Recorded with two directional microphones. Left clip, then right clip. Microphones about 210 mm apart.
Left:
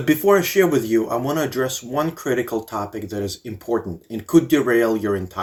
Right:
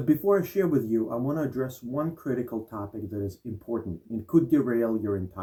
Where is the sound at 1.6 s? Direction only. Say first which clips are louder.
Left 9 dB; 25° left (ahead or behind).